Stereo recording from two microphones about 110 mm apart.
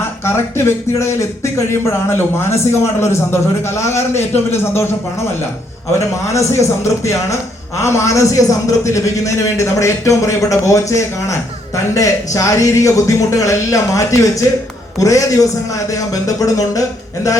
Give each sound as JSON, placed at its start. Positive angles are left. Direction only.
{"t": 0.3, "sound": "a man's voice", "side_deg": 25}
{"t": 6.3, "sound": "a man's voice", "side_deg": 25}